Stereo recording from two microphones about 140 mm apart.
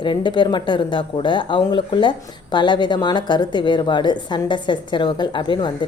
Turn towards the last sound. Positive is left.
turn(degrees=35)  # may be behind; listen again after turning